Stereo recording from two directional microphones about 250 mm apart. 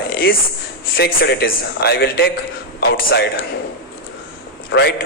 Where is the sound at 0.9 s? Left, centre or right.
Left.